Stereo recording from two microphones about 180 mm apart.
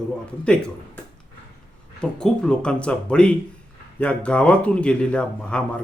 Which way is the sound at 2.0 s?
5° left (ahead or behind).